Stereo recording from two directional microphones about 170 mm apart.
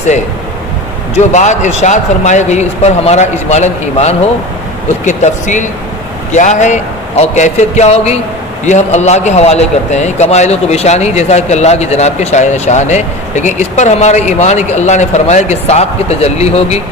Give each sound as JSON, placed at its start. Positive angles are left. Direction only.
{"t": 1.1, "sound": "a man's voice", "side_deg": 45}